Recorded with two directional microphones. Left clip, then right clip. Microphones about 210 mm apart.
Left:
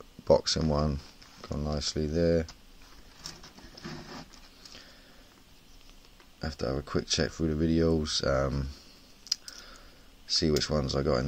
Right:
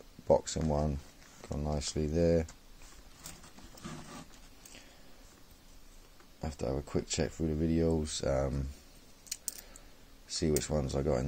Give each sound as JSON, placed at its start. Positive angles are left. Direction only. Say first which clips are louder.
{"t": 0.3, "sound": "speech", "louder": "left 4 dB", "side_deg": 15}
{"t": 6.4, "sound": "speech", "louder": "left 3 dB", "side_deg": 0}
{"t": 10.2, "sound": "speech", "louder": "left 6 dB", "side_deg": 5}